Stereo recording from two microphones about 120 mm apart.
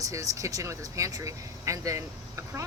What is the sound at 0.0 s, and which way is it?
Speech, 30° right (ahead or behind).